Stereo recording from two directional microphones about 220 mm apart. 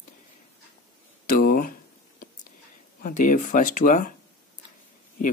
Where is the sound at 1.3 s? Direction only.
40° left (ahead or behind).